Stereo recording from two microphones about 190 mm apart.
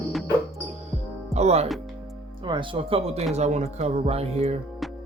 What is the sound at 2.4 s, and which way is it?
Speech, 25° right (ahead or behind).